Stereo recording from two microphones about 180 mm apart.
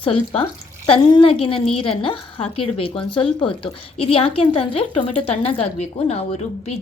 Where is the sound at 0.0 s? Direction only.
30° left (ahead or behind).